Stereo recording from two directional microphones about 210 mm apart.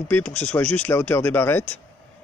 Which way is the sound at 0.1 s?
10° left (ahead or behind).